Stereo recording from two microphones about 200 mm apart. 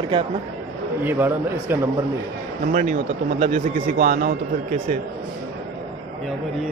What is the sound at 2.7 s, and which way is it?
Speech, 40° right (ahead or behind).